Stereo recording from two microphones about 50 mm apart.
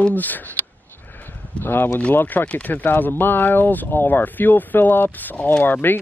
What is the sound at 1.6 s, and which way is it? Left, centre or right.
Speech, left.